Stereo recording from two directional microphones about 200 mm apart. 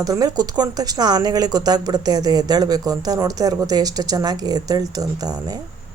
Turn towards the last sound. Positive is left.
turn(degrees=-20)  # may be behind; listen again after turning